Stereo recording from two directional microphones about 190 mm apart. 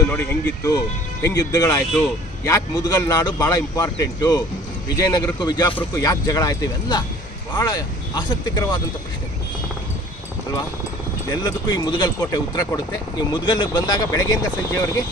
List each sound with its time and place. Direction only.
0.1 s speech: 10° left (ahead or behind)
11.2 s speech: 20° left (ahead or behind)